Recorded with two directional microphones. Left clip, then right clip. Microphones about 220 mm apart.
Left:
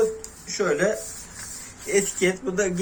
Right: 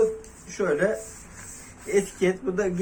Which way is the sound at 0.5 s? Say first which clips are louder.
Left 1 dB; 15° left (ahead or behind).